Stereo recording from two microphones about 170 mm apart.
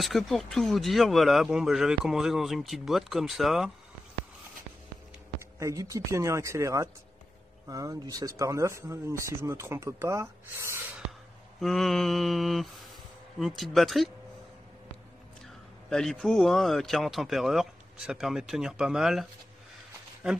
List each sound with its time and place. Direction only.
0.0 s speech: centre (ahead or behind)
5.6 s speech: 20° right (ahead or behind)
11.6 s speech: centre (ahead or behind)
15.9 s speech: centre (ahead or behind)